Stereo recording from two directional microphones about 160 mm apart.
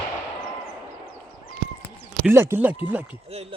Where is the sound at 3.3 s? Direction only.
40° right (ahead or behind).